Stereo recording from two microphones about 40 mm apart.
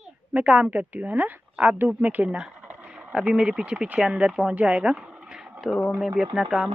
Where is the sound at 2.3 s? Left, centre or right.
Centre.